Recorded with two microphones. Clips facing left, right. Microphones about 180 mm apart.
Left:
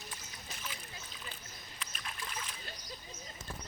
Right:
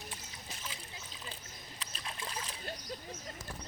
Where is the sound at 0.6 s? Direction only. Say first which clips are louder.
Left 2 dB; 30° right (ahead or behind).